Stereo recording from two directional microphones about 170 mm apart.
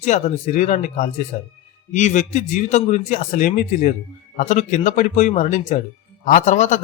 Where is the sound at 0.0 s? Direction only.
45° left (ahead or behind).